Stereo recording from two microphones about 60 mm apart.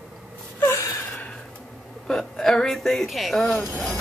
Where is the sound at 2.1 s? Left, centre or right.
Centre.